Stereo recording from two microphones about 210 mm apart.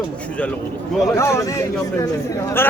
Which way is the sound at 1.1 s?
15° left (ahead or behind).